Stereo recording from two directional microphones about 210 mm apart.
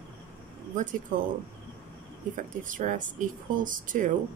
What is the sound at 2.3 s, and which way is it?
Speech, 40° right (ahead or behind).